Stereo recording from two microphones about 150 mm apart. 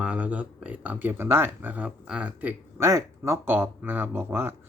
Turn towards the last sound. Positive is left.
turn(degrees=-15)  # may be behind; listen again after turning